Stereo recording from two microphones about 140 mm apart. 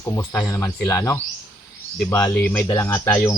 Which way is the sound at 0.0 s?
20° left (ahead or behind).